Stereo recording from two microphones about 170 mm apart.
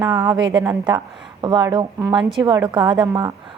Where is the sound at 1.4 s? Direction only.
25° right (ahead or behind).